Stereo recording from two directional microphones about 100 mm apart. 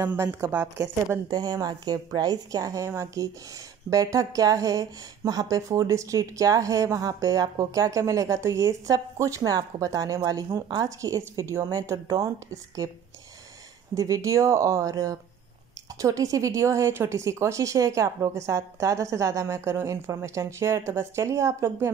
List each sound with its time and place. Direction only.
0.0 s speech: 20° right (ahead or behind)
1.3 s speech: 40° right (ahead or behind)
13.9 s speech: 35° right (ahead or behind)